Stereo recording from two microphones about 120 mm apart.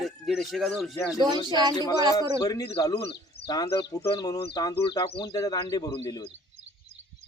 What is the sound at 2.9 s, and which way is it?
Speech, 45° left (ahead or behind).